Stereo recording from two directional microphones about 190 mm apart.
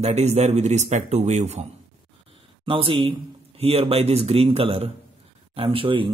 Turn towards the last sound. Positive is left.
turn(degrees=-25)  # may be behind; listen again after turning